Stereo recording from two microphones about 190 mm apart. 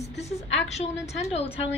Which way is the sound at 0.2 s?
35° left (ahead or behind).